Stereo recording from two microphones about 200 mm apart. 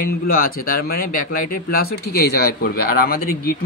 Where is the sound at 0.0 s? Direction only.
45° left (ahead or behind).